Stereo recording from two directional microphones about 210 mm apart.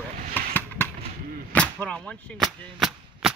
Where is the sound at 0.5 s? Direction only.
10° left (ahead or behind).